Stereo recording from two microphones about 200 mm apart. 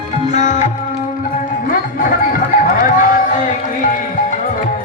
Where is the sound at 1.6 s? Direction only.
45° left (ahead or behind).